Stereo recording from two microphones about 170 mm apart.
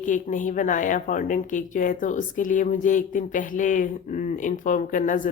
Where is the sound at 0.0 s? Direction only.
50° left (ahead or behind).